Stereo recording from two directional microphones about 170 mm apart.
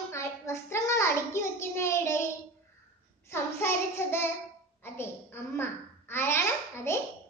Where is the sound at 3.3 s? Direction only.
15° left (ahead or behind).